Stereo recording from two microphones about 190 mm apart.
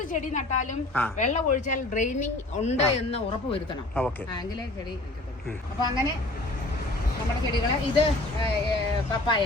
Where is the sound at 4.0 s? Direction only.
5° left (ahead or behind).